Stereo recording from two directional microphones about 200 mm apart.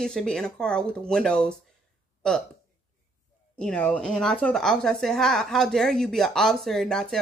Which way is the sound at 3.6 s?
5° left (ahead or behind).